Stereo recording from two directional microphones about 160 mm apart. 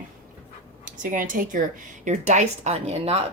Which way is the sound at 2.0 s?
45° right (ahead or behind).